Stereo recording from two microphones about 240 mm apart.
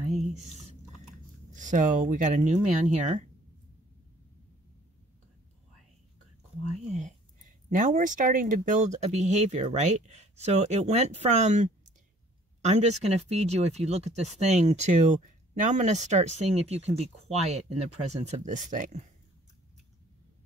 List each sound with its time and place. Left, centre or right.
0.1 s squish: right
1.5 s speech: right
6.9 s speech: right